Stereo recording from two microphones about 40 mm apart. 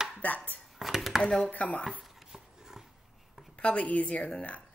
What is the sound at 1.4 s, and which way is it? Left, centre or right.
Speech, left.